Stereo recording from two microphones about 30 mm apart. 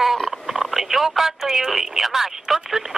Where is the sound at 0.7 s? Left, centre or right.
Centre.